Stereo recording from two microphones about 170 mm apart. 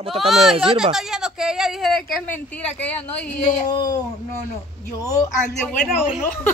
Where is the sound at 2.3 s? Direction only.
5° left (ahead or behind).